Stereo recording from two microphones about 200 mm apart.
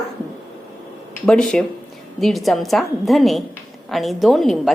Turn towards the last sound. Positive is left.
turn(degrees=0)  # may be behind; listen again after turning